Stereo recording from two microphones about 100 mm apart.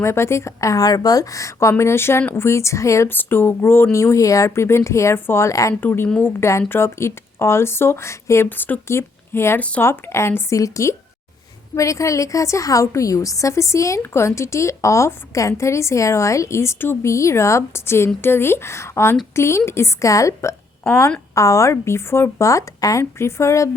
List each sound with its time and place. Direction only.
0.0 s a woman's voice: 25° left (ahead or behind)
9.6 s speech: 15° left (ahead or behind)
9.8 s a woman's voice: 25° left (ahead or behind)